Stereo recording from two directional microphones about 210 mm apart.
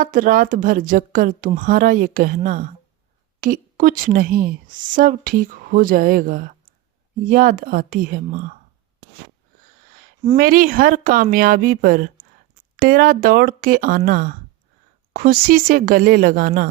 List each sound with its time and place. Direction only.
0.0 s a woman's voice: 40° right (ahead or behind)
9.9 s speech: 40° right (ahead or behind)